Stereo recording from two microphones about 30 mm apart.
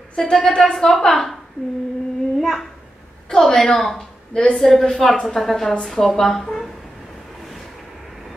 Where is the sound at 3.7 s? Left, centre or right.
Centre.